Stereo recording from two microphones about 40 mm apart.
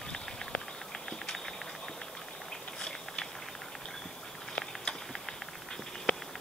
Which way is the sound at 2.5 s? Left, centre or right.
Centre.